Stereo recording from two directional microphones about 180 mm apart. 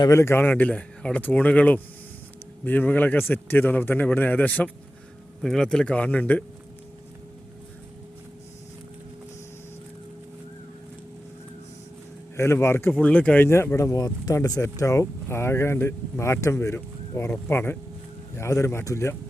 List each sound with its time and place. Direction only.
0.0 s speech: 15° left (ahead or behind)
12.4 s speech: 15° left (ahead or behind)